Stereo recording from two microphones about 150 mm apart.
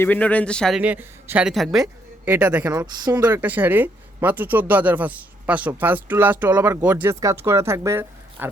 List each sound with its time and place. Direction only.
0.0 s a man's voice: 10° left (ahead or behind)
0.8 s speech: 10° right (ahead or behind)
2.2 s speech: 10° right (ahead or behind)
2.6 s speech: 25° right (ahead or behind)
3.3 s speech: 10° right (ahead or behind)